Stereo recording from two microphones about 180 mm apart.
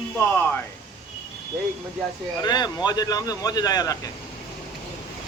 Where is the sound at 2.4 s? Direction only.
25° left (ahead or behind).